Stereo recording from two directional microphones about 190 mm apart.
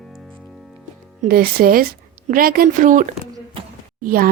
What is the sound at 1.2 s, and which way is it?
Speech, 50° right (ahead or behind).